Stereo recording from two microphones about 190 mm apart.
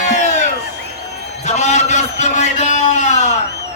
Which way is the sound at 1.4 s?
35° left (ahead or behind).